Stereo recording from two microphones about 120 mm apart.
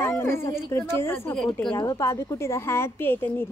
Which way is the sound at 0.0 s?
20° left (ahead or behind).